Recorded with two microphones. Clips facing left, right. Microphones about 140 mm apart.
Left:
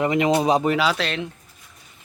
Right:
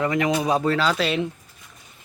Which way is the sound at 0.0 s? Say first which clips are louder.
Left 3 dB; 20° left (ahead or behind).